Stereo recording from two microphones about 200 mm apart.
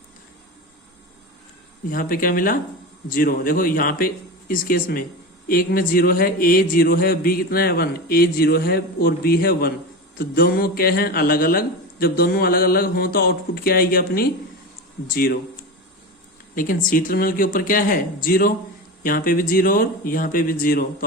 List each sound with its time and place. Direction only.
1.9 s a man's voice: 45° left (ahead or behind)
16.6 s a man's voice: 45° left (ahead or behind)